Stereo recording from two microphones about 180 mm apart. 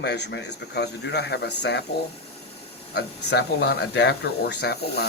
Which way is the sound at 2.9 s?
65° left (ahead or behind).